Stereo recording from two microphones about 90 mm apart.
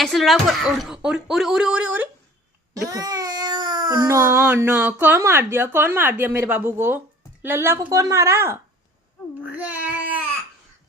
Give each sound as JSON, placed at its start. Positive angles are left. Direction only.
{"t": 0.0, "sound": "speech", "side_deg": 0}
{"t": 2.8, "sound": "baby cry", "side_deg": -45}
{"t": 4.1, "sound": "speech", "side_deg": -35}
{"t": 9.4, "sound": "speech", "side_deg": -20}